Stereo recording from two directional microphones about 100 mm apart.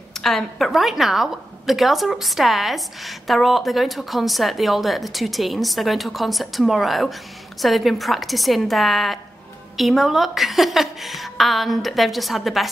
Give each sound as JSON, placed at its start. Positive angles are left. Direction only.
{"t": 0.1, "sound": "a woman's voice", "side_deg": 5}